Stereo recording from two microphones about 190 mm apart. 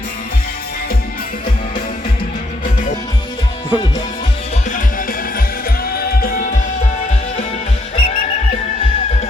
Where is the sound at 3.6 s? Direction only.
25° left (ahead or behind).